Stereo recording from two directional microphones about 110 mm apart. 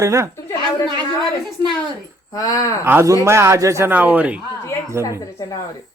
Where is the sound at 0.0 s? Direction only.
25° right (ahead or behind).